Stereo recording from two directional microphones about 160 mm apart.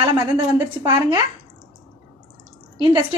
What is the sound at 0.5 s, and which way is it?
Speech, 15° right (ahead or behind).